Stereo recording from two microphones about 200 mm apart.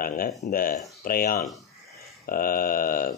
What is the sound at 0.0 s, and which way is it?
A man's voice, 45° left (ahead or behind).